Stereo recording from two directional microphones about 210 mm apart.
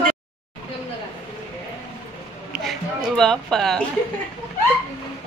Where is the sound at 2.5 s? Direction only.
Centre (ahead or behind).